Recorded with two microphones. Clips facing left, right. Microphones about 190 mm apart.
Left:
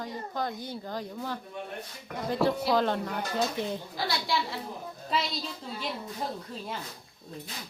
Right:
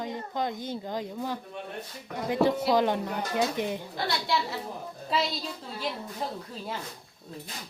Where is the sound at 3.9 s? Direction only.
Centre (ahead or behind).